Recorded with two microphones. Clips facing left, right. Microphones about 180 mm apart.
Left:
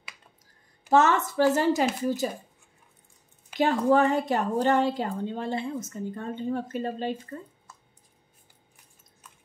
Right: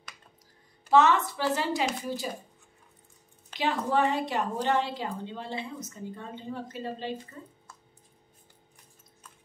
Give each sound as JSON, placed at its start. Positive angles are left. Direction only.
{"t": 0.8, "sound": "a woman's voice", "side_deg": 45}
{"t": 3.5, "sound": "a woman's voice", "side_deg": 45}